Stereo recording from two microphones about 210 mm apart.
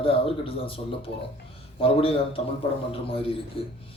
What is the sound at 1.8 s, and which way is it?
Speech, 25° left (ahead or behind).